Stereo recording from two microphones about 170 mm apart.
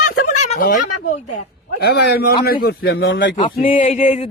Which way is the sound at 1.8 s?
70° left (ahead or behind).